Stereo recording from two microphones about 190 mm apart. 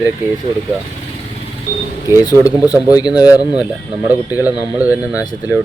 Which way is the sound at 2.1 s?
20° left (ahead or behind).